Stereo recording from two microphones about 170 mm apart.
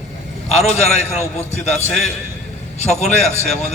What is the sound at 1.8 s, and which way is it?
Speech, 5° left (ahead or behind).